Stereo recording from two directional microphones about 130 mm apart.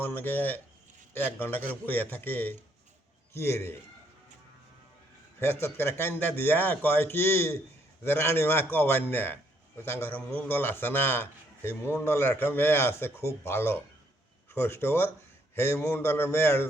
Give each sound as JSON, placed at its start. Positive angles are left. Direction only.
{"t": 0.0, "sound": "a man's voice", "side_deg": 15}
{"t": 5.4, "sound": "a man's voice", "side_deg": 20}